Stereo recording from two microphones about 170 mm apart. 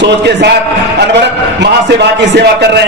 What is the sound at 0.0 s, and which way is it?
Speech, 80° right.